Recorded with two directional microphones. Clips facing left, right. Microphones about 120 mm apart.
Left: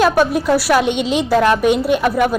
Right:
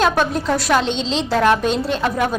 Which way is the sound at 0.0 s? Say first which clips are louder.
Left 4 dB; 10° left (ahead or behind).